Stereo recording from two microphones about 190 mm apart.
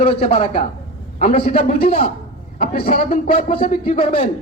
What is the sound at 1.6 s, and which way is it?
A woman's voice, 50° left (ahead or behind).